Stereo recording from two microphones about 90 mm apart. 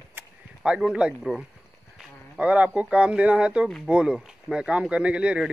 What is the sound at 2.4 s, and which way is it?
Speech, 15° right (ahead or behind).